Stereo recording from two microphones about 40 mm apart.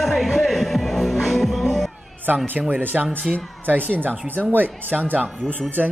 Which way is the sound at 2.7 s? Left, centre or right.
Right.